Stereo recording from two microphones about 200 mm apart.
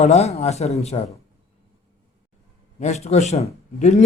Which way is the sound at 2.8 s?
35° left (ahead or behind).